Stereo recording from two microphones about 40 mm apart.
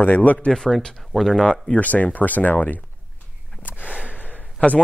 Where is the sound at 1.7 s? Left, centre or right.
Left.